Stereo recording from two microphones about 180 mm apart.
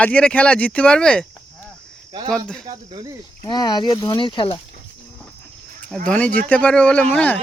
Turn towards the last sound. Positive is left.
turn(degrees=10)  # may be behind; listen again after turning